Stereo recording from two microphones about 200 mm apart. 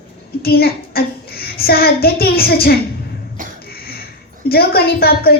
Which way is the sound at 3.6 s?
50° left (ahead or behind).